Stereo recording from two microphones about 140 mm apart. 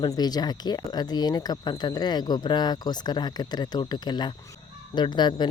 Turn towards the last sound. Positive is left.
turn(degrees=30)  # may be behind; listen again after turning